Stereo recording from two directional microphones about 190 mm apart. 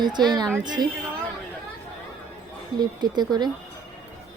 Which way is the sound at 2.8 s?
20° right (ahead or behind).